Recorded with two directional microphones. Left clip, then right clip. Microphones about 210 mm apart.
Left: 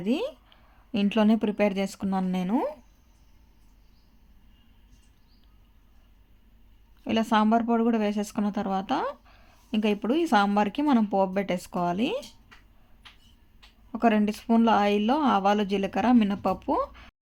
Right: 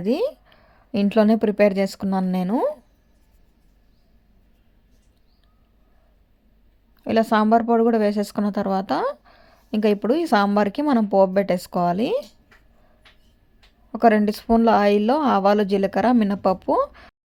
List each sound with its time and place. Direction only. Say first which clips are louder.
0.0 s a woman's voice: right 7 dB; 15° right (ahead or behind)
7.0 s speech: right 5 dB; 15° right (ahead or behind)
13.9 s speech: right 7 dB; 15° right (ahead or behind)